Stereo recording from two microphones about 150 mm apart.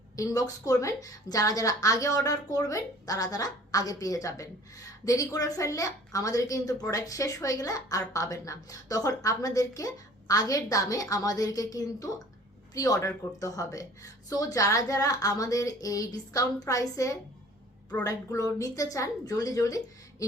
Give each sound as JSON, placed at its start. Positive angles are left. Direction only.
{"t": 0.2, "sound": "a woman's voice", "side_deg": 20}